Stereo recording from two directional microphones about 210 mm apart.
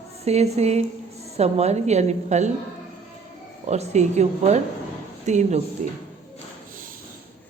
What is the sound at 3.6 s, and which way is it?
A woman's voice, 30° right (ahead or behind).